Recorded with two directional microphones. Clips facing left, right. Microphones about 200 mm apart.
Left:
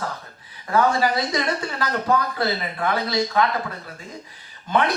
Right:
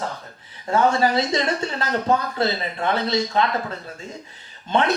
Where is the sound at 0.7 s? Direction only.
25° right (ahead or behind).